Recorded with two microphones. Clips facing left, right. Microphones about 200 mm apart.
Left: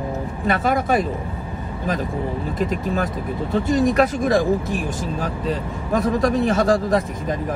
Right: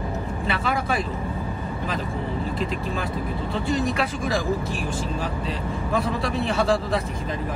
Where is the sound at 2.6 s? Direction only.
45° left (ahead or behind).